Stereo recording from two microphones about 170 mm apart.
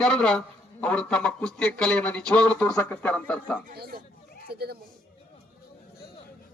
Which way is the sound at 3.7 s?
65° right (ahead or behind).